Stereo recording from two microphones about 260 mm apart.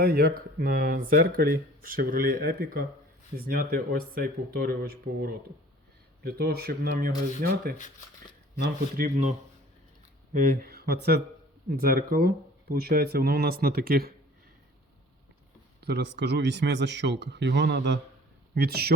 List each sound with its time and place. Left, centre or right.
0.0 s speech: right
9.0 s speech: right
10.5 s speech: right
15.8 s speech: right